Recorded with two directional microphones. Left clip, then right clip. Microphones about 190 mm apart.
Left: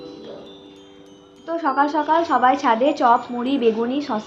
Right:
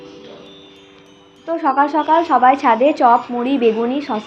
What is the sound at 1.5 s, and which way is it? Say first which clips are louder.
Speech: right 4 dB; 25° right (ahead or behind).